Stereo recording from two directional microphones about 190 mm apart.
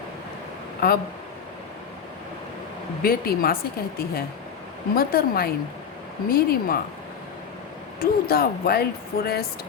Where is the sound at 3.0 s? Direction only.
50° left (ahead or behind).